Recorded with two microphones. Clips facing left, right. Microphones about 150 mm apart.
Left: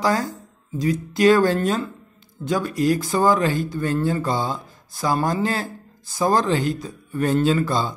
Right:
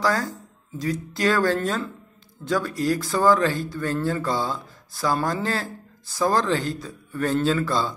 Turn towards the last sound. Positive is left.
turn(degrees=20)  # may be behind; listen again after turning